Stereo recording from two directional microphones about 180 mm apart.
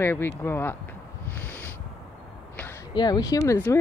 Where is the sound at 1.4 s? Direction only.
10° left (ahead or behind).